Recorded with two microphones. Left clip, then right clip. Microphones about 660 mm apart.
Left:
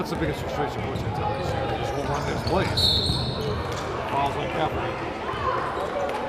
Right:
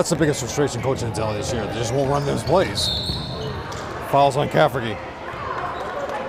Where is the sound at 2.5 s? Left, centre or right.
Right.